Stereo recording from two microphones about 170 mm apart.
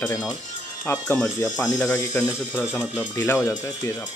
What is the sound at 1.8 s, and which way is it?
Speech, 15° left (ahead or behind).